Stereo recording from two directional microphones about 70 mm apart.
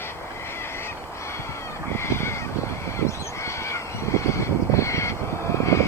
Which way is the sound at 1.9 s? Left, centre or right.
Left.